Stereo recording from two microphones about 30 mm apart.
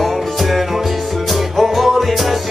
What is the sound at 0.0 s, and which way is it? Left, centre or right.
Music, centre.